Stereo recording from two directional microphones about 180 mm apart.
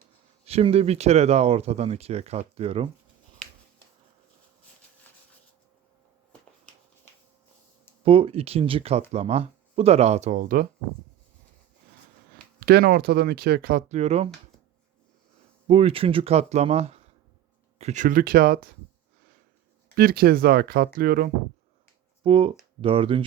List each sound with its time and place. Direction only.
0.4 s speech: 35° right (ahead or behind)
8.0 s speech: 30° right (ahead or behind); by 10.7 s 50° right (ahead or behind)
12.5 s speech: 60° right (ahead or behind)
13.8 s speech: 40° right (ahead or behind)
15.6 s speech: 35° right (ahead or behind); by 18.7 s 55° right (ahead or behind)
20.0 s speech: 55° right (ahead or behind)
22.2 s speech: 30° right (ahead or behind)